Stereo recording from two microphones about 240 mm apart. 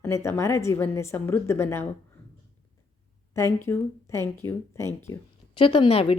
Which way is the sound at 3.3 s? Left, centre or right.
Centre.